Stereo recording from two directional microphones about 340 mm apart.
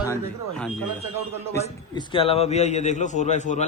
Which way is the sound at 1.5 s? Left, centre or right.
Centre.